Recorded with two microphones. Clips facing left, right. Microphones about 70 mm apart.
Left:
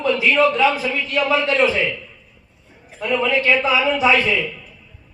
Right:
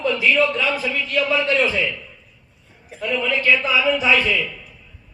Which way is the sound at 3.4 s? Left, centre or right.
Left.